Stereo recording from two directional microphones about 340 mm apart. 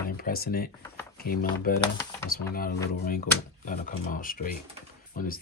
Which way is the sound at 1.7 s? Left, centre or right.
Left.